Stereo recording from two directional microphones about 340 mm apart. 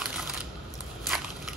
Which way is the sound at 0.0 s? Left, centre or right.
Centre.